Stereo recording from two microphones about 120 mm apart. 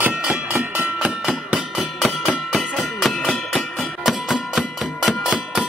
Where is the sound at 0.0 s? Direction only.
10° right (ahead or behind).